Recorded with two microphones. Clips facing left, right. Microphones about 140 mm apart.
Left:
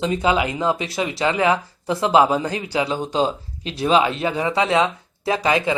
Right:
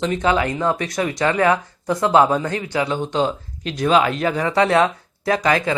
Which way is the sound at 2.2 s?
10° left (ahead or behind).